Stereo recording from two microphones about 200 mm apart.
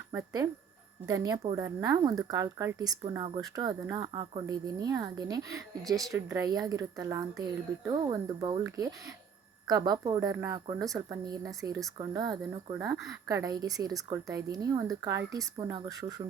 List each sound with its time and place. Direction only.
0.1 s speech: 15° right (ahead or behind)